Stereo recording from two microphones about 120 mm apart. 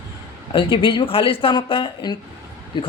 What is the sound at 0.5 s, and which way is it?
A man's voice, 45° left (ahead or behind).